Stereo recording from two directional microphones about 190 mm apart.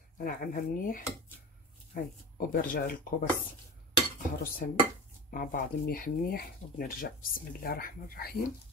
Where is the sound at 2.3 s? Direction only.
50° left (ahead or behind).